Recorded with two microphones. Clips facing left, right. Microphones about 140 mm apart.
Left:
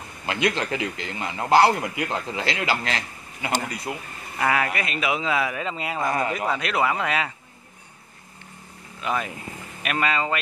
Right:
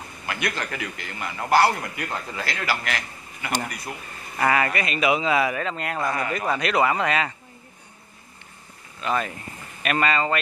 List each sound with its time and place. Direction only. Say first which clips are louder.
0.3 s a man's voice: left 5 dB; 20° left (ahead or behind)
4.4 s a man's voice: right 1 dB; centre (ahead or behind)
9.0 s speech: right 1 dB; 10° left (ahead or behind)